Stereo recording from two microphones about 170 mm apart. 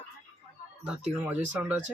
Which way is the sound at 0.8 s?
5° right (ahead or behind).